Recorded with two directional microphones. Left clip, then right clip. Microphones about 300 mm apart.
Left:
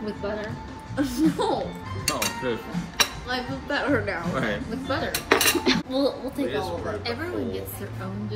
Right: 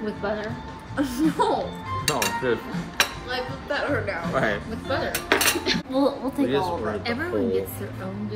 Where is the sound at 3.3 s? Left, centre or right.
Left.